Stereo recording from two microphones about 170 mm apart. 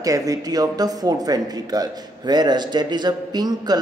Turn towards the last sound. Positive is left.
turn(degrees=-25)  # may be behind; listen again after turning